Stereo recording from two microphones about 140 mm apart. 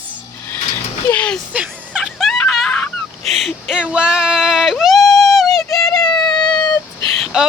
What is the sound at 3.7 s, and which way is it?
Yodeling, 5° right (ahead or behind).